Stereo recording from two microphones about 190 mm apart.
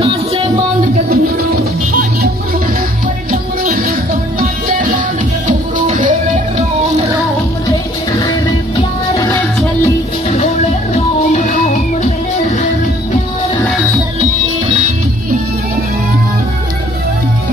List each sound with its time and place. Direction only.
3.3 s music: 50° right (ahead or behind)